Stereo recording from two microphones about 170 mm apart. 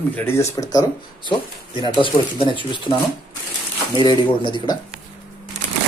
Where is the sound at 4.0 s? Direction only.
25° left (ahead or behind).